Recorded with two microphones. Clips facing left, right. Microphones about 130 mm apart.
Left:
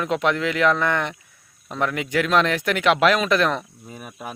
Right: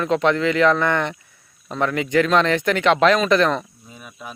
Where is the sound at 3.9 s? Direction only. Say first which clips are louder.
Left 3 dB; 50° left (ahead or behind).